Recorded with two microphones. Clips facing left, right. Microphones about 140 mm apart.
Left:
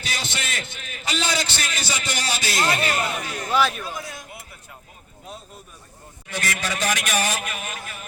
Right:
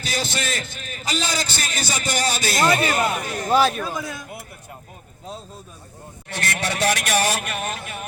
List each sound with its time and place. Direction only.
0.0 s a man's voice: 40° right (ahead or behind)
6.2 s a man's voice: 65° right (ahead or behind)